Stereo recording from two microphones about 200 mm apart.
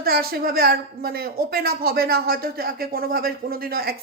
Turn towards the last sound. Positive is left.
turn(degrees=-50)  # may be behind; listen again after turning